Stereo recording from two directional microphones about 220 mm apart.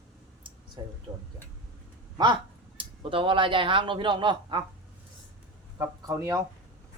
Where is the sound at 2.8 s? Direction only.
25° right (ahead or behind).